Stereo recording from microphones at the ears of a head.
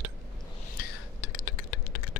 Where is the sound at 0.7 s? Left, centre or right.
Left.